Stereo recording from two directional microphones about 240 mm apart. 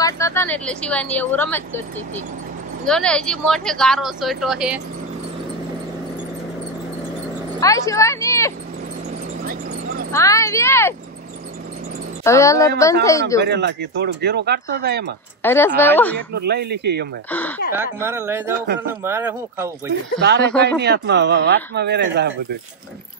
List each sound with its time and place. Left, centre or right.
0.0 s a woman's voice: centre
7.6 s speech: centre
10.1 s a woman's voice: centre
12.2 s a woman's voice: centre
13.4 s speech: right
15.4 s a woman's voice: centre
16.3 s speech: right
17.3 s a woman's voice: centre
18.0 s a man's voice: centre
20.2 s speech: right